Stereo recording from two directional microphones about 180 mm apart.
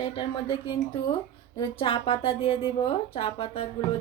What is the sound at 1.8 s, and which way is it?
Speech, 30° left (ahead or behind).